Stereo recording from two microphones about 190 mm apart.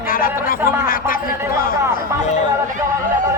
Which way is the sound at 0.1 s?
50° left (ahead or behind).